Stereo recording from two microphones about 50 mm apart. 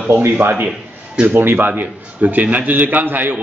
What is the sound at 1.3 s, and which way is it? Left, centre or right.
A man's voice, right.